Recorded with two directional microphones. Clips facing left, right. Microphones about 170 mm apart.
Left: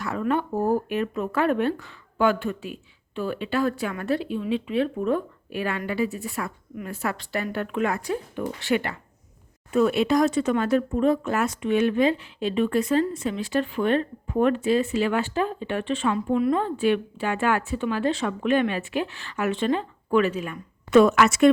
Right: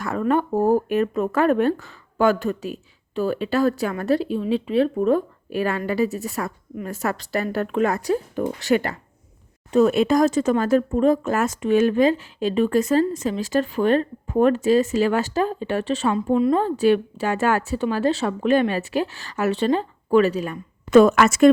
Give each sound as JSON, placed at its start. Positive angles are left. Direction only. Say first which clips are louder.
{"t": 0.0, "sound": "speech", "louder": "right 4 dB", "side_deg": -45}